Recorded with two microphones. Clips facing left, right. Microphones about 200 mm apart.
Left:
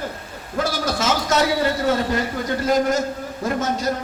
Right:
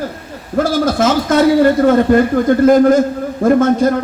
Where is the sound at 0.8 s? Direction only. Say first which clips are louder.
Right 8 dB; 55° right (ahead or behind).